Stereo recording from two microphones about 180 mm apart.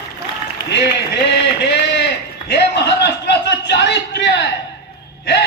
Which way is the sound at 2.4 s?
70° left (ahead or behind).